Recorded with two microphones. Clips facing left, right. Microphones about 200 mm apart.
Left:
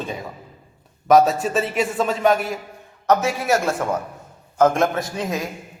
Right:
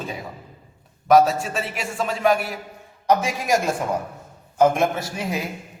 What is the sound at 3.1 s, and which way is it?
A man's voice, 15° right (ahead or behind).